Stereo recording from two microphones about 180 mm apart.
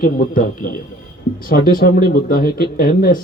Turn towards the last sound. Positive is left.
turn(degrees=55)  # may be behind; listen again after turning